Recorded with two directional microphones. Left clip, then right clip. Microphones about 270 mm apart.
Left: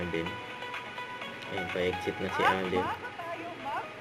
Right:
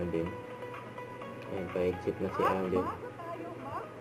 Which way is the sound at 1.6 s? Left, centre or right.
Centre.